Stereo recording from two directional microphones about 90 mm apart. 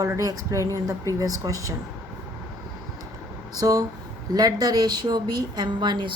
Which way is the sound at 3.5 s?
40° right (ahead or behind).